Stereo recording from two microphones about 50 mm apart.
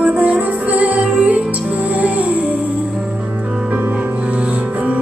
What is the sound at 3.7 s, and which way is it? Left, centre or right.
Music, right.